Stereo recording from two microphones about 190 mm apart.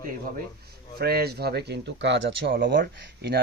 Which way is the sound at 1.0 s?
55° right (ahead or behind).